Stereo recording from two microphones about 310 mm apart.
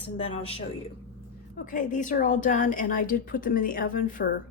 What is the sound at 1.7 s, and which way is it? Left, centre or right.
A woman's voice, left.